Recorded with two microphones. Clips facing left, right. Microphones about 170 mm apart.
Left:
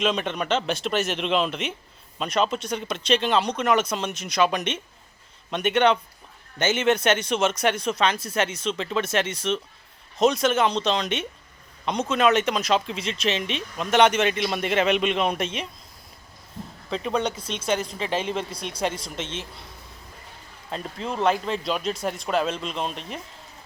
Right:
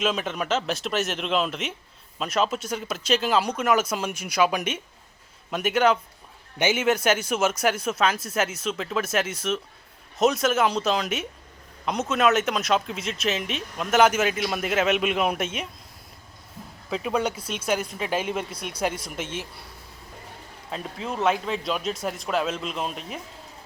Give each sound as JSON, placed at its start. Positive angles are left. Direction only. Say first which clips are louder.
{"t": 0.0, "sound": "speech", "louder": "left 1 dB", "side_deg": -5}
{"t": 16.9, "sound": "speech", "louder": "even", "side_deg": -5}
{"t": 20.7, "sound": "speech", "louder": "left 1 dB", "side_deg": 0}